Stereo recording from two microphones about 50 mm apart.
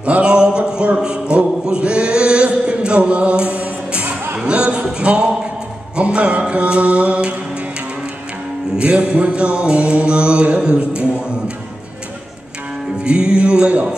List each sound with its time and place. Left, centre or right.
0.0 s a sound: right
4.4 s music: right
4.9 s a sound: right
5.9 s music: right
8.7 s music: right
13.0 s music: centre